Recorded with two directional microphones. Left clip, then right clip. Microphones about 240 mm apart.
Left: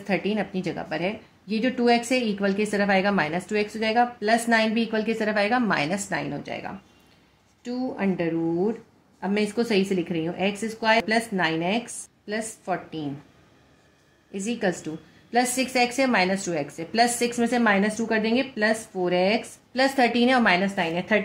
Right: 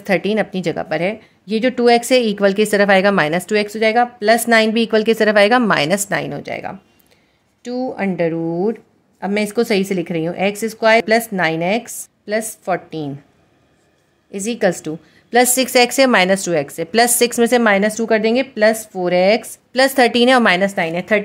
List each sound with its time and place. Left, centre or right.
0.0 s a woman's voice: right
14.3 s a woman's voice: right